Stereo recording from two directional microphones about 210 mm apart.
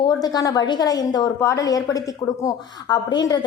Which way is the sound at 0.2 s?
20° left (ahead or behind).